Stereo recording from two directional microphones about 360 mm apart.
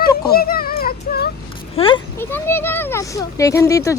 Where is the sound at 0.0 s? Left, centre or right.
Left.